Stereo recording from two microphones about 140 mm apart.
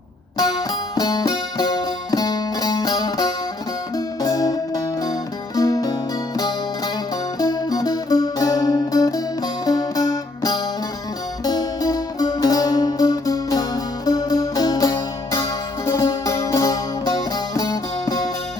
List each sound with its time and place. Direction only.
0.3 s music: 30° left (ahead or behind)